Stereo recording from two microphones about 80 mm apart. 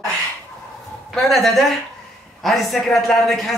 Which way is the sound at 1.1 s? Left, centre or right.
Centre.